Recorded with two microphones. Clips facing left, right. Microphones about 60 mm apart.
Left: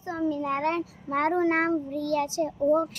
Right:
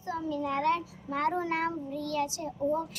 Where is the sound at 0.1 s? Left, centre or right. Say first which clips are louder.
Left 4 dB; left.